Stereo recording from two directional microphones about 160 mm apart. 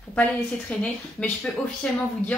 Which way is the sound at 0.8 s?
5° left (ahead or behind).